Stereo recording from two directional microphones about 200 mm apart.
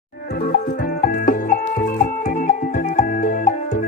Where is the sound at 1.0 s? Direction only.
45° left (ahead or behind).